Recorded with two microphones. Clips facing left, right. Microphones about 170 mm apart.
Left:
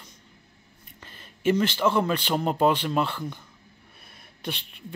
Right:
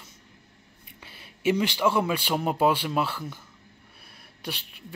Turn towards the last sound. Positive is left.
turn(degrees=-5)  # may be behind; listen again after turning